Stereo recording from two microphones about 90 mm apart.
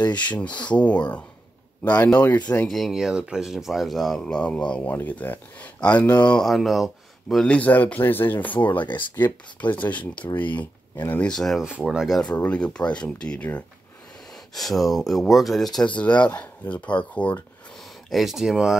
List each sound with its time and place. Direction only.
0.1 s speech: 15° left (ahead or behind)
2.7 s speech: 5° right (ahead or behind); by 6.3 s 20° left (ahead or behind)
6.3 s speech: centre (ahead or behind)
7.5 s speech: 20° left (ahead or behind)
11.2 s speech: 5° left (ahead or behind)
11.6 s speech: 5° right (ahead or behind)
12.4 s speech: 15° left (ahead or behind)
14.5 s speech: centre (ahead or behind)
15.9 s speech: 15° left (ahead or behind)
18.1 s speech: 5° right (ahead or behind)